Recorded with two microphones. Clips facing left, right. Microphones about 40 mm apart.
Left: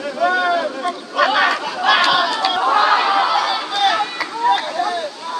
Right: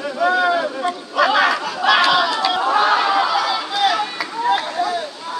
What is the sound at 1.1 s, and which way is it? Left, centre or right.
Chatter, centre.